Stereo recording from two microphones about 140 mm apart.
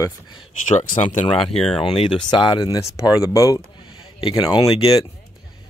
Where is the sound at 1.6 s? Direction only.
40° left (ahead or behind).